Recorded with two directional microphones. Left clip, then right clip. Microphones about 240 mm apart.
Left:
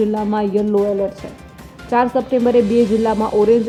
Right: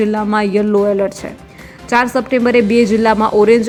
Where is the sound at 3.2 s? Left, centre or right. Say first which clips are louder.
Right 4 dB; right.